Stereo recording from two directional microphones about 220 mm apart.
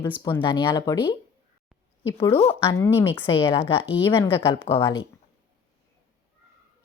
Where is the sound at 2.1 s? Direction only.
25° left (ahead or behind).